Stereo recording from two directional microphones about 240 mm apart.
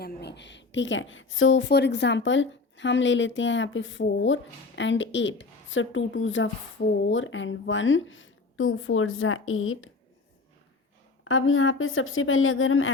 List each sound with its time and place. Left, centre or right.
0.0 s a woman's voice: left
11.2 s a woman's voice: left